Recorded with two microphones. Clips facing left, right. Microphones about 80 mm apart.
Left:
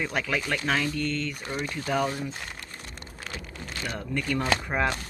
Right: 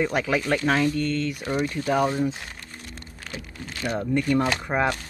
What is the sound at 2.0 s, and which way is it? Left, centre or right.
Speech, right.